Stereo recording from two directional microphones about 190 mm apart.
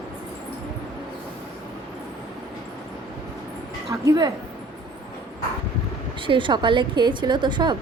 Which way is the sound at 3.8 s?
20° right (ahead or behind).